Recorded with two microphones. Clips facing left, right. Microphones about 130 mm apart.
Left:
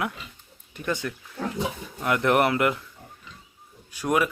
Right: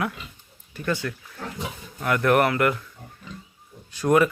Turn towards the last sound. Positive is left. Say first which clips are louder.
# right 5 dB
turn(degrees=10)  # may be behind; listen again after turning